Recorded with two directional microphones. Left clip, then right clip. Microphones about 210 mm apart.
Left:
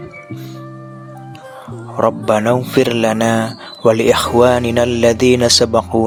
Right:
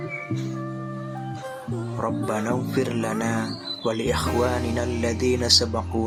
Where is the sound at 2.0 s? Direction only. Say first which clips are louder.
Left 13 dB; 40° left (ahead or behind).